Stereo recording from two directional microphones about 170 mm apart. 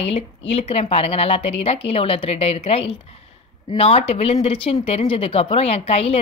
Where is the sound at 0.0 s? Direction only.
35° left (ahead or behind).